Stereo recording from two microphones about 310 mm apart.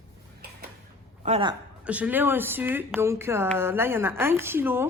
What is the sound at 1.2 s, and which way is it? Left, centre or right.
Speech, centre.